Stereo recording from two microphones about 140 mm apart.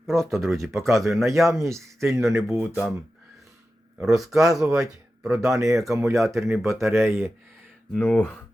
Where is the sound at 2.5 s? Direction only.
15° right (ahead or behind).